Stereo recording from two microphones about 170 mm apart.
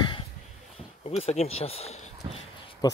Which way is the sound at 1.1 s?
35° left (ahead or behind).